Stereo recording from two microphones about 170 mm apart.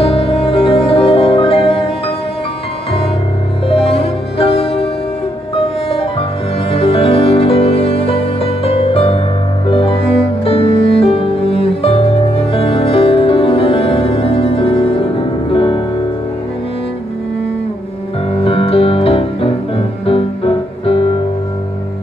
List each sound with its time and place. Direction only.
0.0 s music: 35° left (ahead or behind)
3.6 s music: 35° left (ahead or behind)
5.9 s music: 35° left (ahead or behind)
18.3 s music: 35° left (ahead or behind)